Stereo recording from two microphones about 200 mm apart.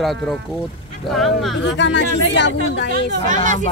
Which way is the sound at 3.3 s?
40° right (ahead or behind).